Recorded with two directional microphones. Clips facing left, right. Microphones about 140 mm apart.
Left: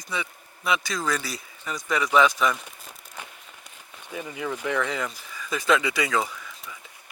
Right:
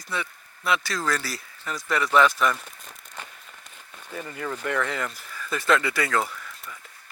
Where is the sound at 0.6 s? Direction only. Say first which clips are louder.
Even; 15° left (ahead or behind).